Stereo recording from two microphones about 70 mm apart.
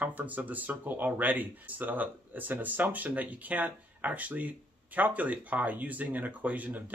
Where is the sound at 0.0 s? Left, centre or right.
Right.